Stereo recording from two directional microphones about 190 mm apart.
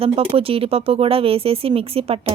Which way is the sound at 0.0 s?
30° right (ahead or behind).